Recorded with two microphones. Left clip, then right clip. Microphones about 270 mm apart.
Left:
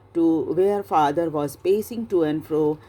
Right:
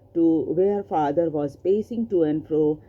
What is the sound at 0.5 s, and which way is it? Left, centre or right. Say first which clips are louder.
Speech: left 2 dB; left.